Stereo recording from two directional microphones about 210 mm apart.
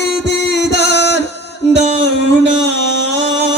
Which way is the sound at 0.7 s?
50° left (ahead or behind).